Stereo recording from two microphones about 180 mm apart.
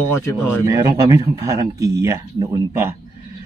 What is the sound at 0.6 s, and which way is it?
Speech, 15° right (ahead or behind).